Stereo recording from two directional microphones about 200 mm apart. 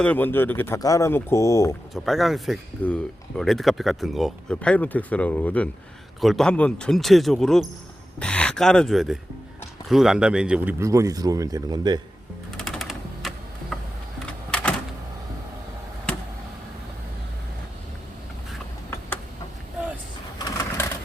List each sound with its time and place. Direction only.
0.0 s speech: 10° left (ahead or behind)
1.9 s speech: centre (ahead or behind); by 11.9 s 20° right (ahead or behind)
12.5 s typewriter: centre (ahead or behind)
20.4 s a sound: 15° left (ahead or behind)